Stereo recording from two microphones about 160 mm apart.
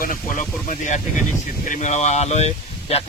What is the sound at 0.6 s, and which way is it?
Speech, 50° left (ahead or behind).